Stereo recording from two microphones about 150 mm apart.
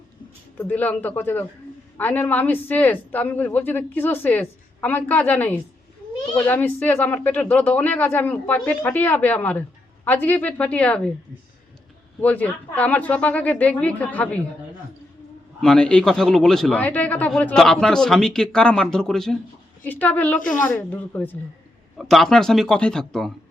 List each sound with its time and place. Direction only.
0.6 s speech: 10° left (ahead or behind)
12.2 s speech: 10° left (ahead or behind)
15.6 s a man's voice: 5° left (ahead or behind)